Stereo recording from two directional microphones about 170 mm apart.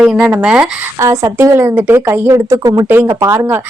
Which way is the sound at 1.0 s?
15° right (ahead or behind).